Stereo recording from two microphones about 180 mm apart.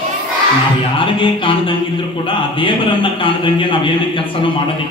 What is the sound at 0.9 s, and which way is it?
Speech, 30° left (ahead or behind).